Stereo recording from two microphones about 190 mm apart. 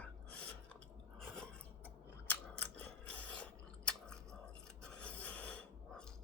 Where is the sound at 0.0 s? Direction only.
5° left (ahead or behind).